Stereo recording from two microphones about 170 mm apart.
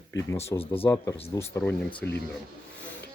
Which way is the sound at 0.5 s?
35° left (ahead or behind).